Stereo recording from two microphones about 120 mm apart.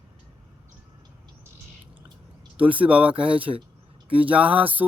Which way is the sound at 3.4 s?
50° right (ahead or behind).